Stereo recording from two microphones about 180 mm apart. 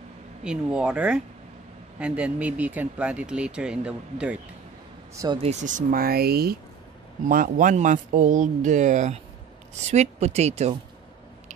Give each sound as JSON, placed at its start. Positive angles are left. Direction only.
{"t": 0.4, "sound": "speech", "side_deg": -5}
{"t": 5.1, "sound": "speech", "side_deg": -20}
{"t": 5.4, "sound": "speech", "side_deg": -40}